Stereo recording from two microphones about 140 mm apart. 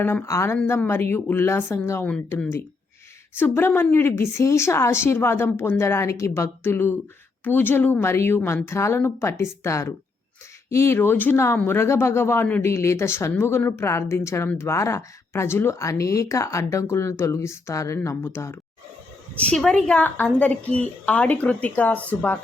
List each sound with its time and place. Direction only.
0.0 s a woman's voice: 15° left (ahead or behind)
3.3 s a woman's voice: 15° left (ahead or behind)
19.4 s a woman's voice: 5° left (ahead or behind)